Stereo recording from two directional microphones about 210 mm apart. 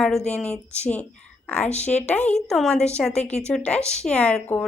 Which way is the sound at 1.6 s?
30° left (ahead or behind).